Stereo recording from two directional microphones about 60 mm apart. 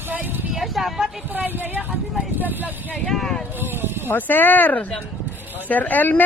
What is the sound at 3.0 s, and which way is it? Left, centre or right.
Speech, centre.